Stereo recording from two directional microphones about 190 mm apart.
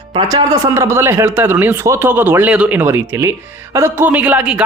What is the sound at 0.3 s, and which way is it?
A man's voice, 15° right (ahead or behind).